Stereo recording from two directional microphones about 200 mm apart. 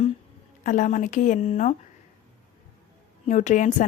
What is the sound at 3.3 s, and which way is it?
Speech, 35° left (ahead or behind).